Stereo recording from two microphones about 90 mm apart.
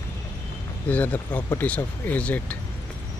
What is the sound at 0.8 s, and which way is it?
Speech, 15° left (ahead or behind).